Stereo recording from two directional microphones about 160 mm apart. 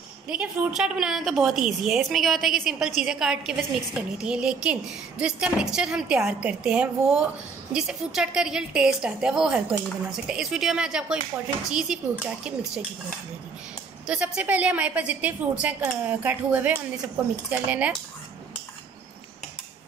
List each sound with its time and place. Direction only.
0.3 s a woman's voice: 5° right (ahead or behind)
14.0 s a woman's voice: 5° right (ahead or behind)